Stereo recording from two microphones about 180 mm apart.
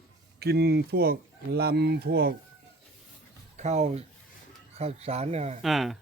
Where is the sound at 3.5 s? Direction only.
40° right (ahead or behind).